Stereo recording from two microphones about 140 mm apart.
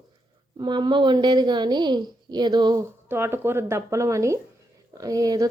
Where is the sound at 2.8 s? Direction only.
15° right (ahead or behind).